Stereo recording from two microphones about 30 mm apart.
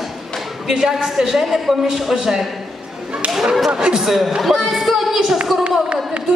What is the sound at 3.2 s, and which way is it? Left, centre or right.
Whip, right.